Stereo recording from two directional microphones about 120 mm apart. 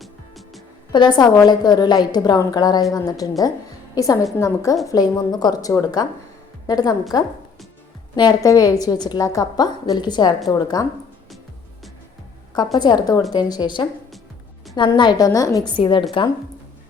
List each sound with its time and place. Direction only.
0.0 s music: centre (ahead or behind)
0.9 s a woman's voice: 35° left (ahead or behind)
12.7 s a woman's voice: 35° left (ahead or behind)
14.9 s a woman's voice: 40° left (ahead or behind)
15.3 s a woman's voice: 25° left (ahead or behind)
15.7 s a woman's voice: 40° left (ahead or behind)